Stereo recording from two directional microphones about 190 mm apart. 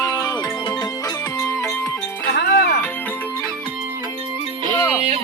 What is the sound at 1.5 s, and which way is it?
Music, 15° left (ahead or behind).